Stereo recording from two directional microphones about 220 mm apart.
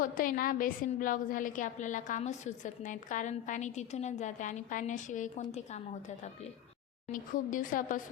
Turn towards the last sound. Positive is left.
turn(degrees=35)  # may be behind; listen again after turning